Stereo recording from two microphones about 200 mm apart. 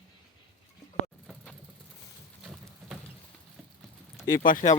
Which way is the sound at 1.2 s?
5° left (ahead or behind).